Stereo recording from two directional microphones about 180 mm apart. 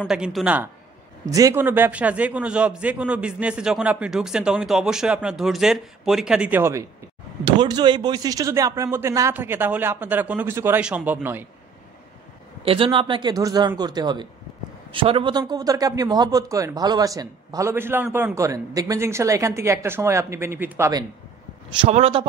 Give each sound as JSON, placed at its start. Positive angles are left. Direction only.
{"t": 0.0, "sound": "a man's voice", "side_deg": -5}
{"t": 7.4, "sound": "a man's voice", "side_deg": -25}
{"t": 12.6, "sound": "a man's voice", "side_deg": -30}
{"t": 21.7, "sound": "a man's voice", "side_deg": -35}